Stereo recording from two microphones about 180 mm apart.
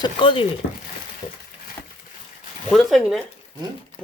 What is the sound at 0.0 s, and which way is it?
Speech, 30° left (ahead or behind).